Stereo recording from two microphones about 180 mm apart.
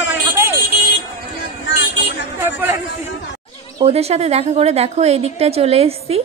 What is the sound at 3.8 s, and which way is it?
A woman's voice, 35° right (ahead or behind).